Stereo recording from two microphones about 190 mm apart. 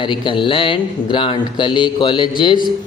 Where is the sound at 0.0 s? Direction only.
25° left (ahead or behind).